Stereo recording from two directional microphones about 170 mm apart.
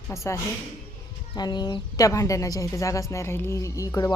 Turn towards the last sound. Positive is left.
turn(degrees=20)  # may be behind; listen again after turning